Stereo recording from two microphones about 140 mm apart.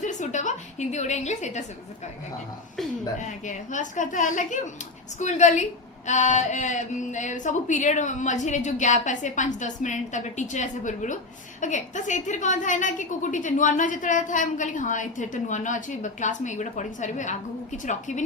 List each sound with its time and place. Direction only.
0.0 s a woman's voice: 60° left (ahead or behind)
3.2 s a woman's voice: 60° left (ahead or behind)